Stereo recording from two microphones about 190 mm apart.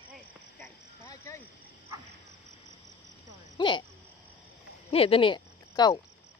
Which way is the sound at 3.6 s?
25° left (ahead or behind).